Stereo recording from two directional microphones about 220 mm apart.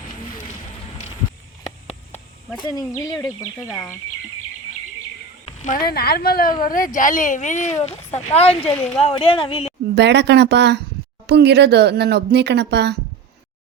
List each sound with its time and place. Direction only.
2.6 s speech: 15° left (ahead or behind)
5.5 s speech: 40° left (ahead or behind)
9.9 s speech: 50° right (ahead or behind)